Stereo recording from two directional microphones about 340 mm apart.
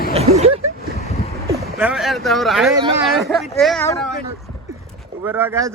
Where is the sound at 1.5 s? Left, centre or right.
Centre.